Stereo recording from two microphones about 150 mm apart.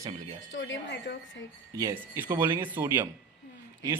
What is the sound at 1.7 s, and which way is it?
Speech, 20° right (ahead or behind).